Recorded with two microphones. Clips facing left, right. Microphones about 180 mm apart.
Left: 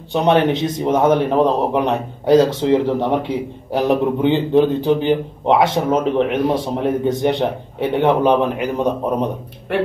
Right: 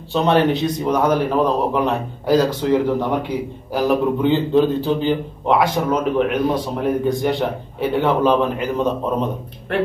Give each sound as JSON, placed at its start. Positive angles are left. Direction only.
{"t": 0.1, "sound": "a man's voice", "side_deg": 20}